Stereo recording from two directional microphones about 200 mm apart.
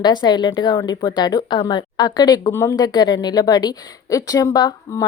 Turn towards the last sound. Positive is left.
turn(degrees=15)  # may be behind; listen again after turning